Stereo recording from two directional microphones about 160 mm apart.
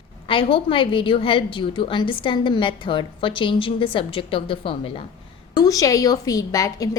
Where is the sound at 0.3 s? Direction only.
35° left (ahead or behind).